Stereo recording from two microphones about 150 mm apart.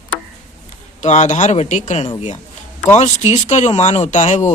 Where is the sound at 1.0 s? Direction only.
55° left (ahead or behind).